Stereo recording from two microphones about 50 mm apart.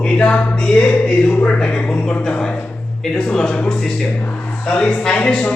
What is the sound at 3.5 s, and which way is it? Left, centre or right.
Speech, left.